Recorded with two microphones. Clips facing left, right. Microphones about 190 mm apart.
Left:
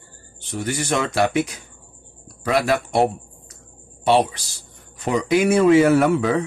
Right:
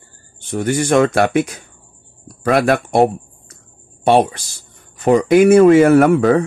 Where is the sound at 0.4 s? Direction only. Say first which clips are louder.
Right 8 dB; 50° right (ahead or behind).